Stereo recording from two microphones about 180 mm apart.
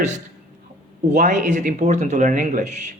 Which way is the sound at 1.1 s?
40° right (ahead or behind).